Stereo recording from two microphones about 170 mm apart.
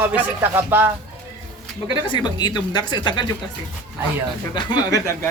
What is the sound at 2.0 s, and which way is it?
Speech, 25° left (ahead or behind).